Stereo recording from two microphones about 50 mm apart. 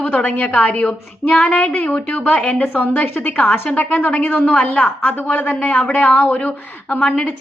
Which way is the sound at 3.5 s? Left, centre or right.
Left.